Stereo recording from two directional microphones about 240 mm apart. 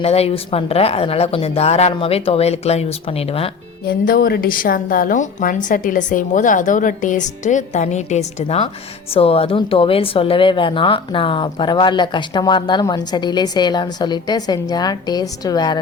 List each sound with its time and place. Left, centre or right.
0.0 s a woman's voice: left
3.8 s a woman's voice: left; by 15.8 s centre